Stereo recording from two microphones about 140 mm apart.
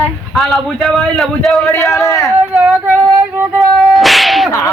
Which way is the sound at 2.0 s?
20° left (ahead or behind).